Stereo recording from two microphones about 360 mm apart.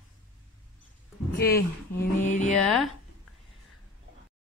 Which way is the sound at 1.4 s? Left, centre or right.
Left.